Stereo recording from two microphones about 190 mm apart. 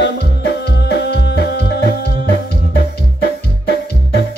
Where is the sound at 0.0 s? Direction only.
60° left (ahead or behind).